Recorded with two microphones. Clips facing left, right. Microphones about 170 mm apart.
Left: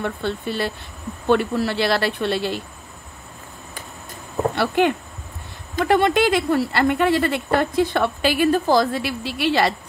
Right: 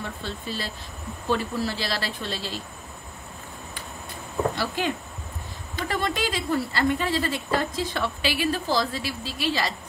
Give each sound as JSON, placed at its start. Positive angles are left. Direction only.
{"t": 0.0, "sound": "a woman's voice", "side_deg": 60}
{"t": 4.6, "sound": "a woman's voice", "side_deg": 60}